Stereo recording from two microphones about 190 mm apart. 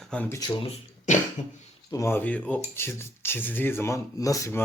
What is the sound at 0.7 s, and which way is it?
Cough, 40° left (ahead or behind).